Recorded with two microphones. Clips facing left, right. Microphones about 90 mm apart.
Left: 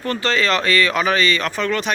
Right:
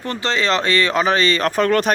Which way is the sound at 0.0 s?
20° right (ahead or behind).